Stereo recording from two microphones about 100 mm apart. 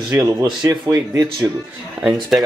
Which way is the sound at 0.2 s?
35° right (ahead or behind).